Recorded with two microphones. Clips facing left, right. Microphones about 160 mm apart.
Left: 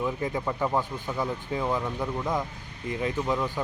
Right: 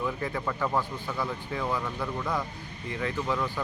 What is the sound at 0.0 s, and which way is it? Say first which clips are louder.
Speech: left 2 dB; 20° left (ahead or behind).